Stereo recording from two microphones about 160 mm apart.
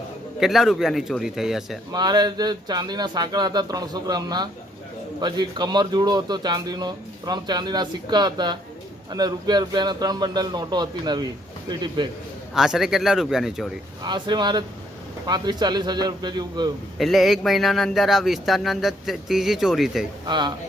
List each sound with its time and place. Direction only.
0.3 s speech: centre (ahead or behind)
1.9 s a man's voice: 25° right (ahead or behind)
12.5 s speech: centre (ahead or behind)
14.0 s a man's voice: 30° right (ahead or behind)
17.0 s speech: centre (ahead or behind)
20.2 s a man's voice: 30° right (ahead or behind)